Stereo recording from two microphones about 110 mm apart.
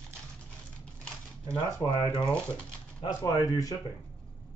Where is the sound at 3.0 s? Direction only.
35° left (ahead or behind).